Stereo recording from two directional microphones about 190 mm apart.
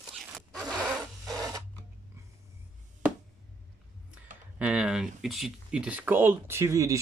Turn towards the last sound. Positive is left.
turn(degrees=-15)  # may be behind; listen again after turning